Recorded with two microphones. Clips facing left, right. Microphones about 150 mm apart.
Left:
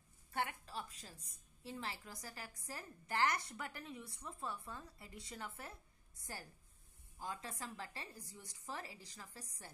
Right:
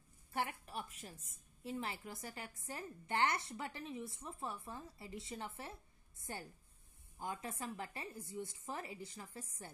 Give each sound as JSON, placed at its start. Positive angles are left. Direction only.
{"t": 0.3, "sound": "a woman's voice", "side_deg": -25}
{"t": 7.2, "sound": "a woman's voice", "side_deg": -25}